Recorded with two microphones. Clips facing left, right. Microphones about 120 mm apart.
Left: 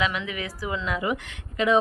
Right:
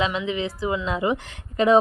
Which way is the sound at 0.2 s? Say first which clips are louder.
Right 6 dB; 25° right (ahead or behind).